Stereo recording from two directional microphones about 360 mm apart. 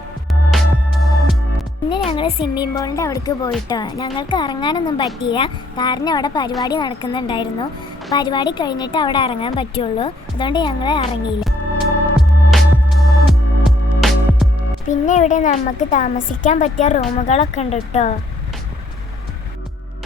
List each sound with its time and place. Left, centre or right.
0.3 s music: centre
2.0 s a woman's voice: centre
12.5 s music: centre
14.8 s a child's voice: centre